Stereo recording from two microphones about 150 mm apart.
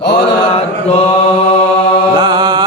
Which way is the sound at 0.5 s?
40° left (ahead or behind).